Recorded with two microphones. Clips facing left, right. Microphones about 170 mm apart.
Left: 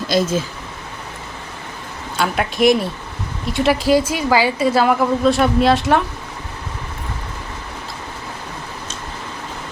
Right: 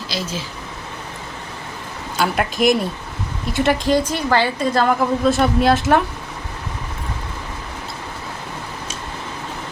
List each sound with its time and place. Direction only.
0.1 s speech: 50° left (ahead or behind)
2.1 s a woman's voice: centre (ahead or behind)